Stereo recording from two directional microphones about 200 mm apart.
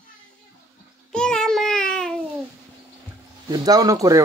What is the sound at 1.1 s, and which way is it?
Child singing, 5° left (ahead or behind).